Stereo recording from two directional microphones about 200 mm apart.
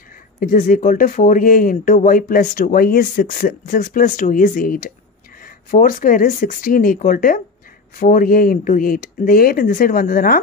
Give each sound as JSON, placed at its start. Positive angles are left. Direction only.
{"t": 0.4, "sound": "speech", "side_deg": 40}